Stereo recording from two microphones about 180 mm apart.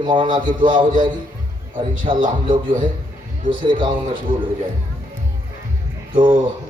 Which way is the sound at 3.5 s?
25° right (ahead or behind).